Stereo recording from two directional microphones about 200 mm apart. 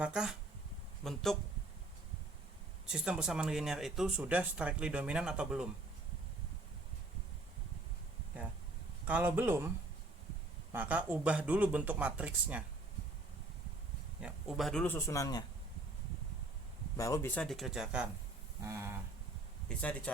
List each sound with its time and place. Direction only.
0.0 s speech: 5° right (ahead or behind)
2.8 s speech: 5° right (ahead or behind)
9.0 s speech: 10° right (ahead or behind)
14.2 s speech: centre (ahead or behind)
14.9 s speech: 15° left (ahead or behind)
17.0 s speech: 15° left (ahead or behind); by 18.0 s centre (ahead or behind)
18.6 s speech: 15° right (ahead or behind)
19.6 s speech: 5° left (ahead or behind)